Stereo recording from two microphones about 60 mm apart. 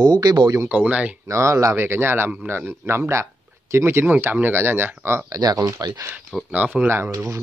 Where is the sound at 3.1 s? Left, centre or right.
Right.